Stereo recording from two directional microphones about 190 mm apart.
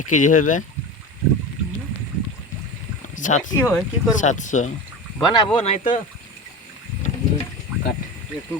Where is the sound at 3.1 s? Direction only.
40° left (ahead or behind).